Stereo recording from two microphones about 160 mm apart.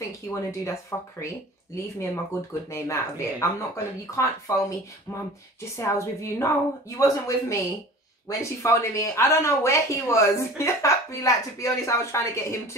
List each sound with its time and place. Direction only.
0.3 s speech: 20° left (ahead or behind)
2.7 s a woman's voice: 15° left (ahead or behind)